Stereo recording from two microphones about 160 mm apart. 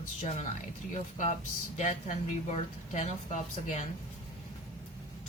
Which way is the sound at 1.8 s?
45° left (ahead or behind).